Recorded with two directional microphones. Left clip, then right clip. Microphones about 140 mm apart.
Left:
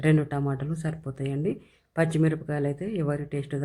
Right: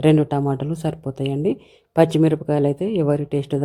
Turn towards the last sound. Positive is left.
turn(degrees=-40)  # may be behind; listen again after turning